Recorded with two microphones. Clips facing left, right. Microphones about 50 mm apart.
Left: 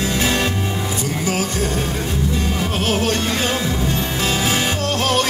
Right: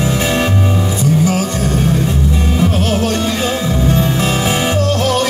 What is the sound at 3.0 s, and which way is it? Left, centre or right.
Music, left.